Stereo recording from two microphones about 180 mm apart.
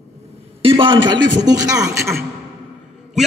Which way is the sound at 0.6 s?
30° right (ahead or behind).